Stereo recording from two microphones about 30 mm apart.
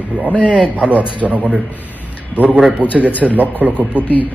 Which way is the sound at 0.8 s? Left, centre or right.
Right.